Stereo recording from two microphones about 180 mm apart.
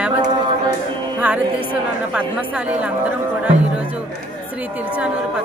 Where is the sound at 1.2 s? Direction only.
5° right (ahead or behind).